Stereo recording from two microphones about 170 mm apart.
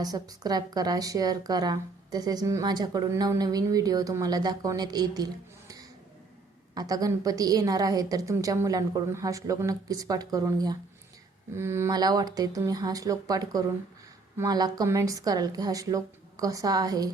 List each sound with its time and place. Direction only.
0.0 s a woman's voice: 20° right (ahead or behind)